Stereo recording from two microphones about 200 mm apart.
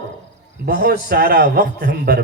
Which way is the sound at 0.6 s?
50° right (ahead or behind).